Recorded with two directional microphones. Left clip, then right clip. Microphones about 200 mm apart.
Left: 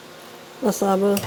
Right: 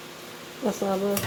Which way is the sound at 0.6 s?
30° left (ahead or behind).